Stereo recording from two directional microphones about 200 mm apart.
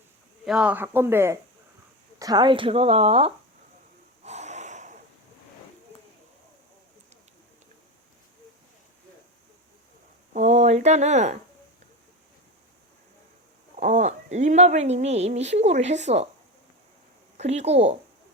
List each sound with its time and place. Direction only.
0.4 s a woman's voice: 5° right (ahead or behind); by 3.3 s 30° right (ahead or behind)
4.2 s wheeze: 35° right (ahead or behind)
10.3 s speech: 35° right (ahead or behind)
13.7 s speech: 35° right (ahead or behind)
17.3 s speech: 35° right (ahead or behind)